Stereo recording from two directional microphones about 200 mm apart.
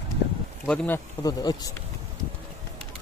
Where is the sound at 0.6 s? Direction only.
10° left (ahead or behind).